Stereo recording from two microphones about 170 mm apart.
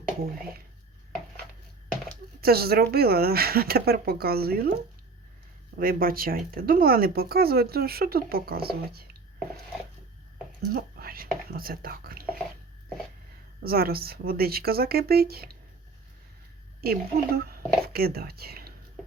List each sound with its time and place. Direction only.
2.4 s speech: 65° right (ahead or behind)
5.7 s speech: 60° right (ahead or behind)
10.7 s speech: 60° right (ahead or behind)
13.6 s speech: 65° right (ahead or behind)
16.8 s speech: 65° right (ahead or behind)